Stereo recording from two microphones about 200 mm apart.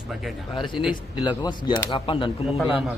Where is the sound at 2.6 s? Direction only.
5° right (ahead or behind).